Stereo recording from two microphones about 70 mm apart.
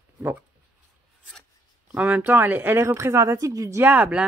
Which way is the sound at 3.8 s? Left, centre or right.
Right.